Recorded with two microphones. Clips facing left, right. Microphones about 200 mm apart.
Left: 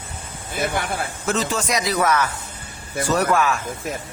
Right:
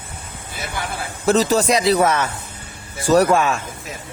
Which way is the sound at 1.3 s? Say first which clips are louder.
Right 7 dB; 35° right (ahead or behind).